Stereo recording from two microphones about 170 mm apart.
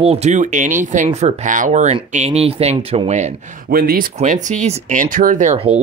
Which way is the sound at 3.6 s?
65° right (ahead or behind).